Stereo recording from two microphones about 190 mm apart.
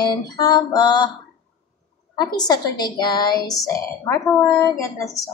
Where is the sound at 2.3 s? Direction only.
20° left (ahead or behind).